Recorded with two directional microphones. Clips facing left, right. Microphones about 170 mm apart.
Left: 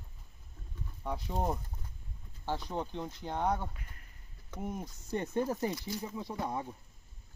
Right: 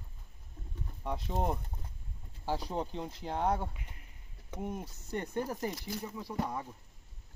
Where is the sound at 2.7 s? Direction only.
Centre (ahead or behind).